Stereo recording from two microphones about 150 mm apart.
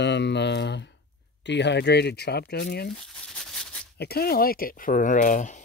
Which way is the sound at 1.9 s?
90° left.